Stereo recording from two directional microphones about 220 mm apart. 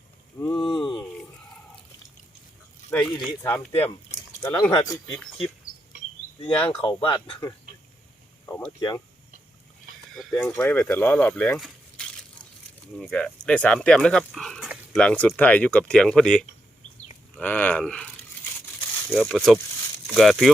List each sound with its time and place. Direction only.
0.4 s a sound: 5° left (ahead or behind)
2.9 s speech: 5° left (ahead or behind)
6.6 s speech: 10° left (ahead or behind)
10.2 s speech: centre (ahead or behind)
19.1 s speech: centre (ahead or behind)